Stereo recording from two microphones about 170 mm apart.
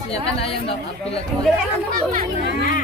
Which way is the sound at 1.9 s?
55° right (ahead or behind).